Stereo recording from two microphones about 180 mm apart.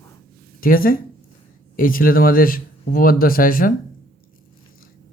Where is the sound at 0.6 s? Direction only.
50° left (ahead or behind).